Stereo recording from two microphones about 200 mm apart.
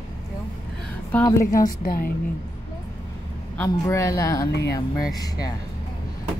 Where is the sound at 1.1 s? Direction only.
5° left (ahead or behind).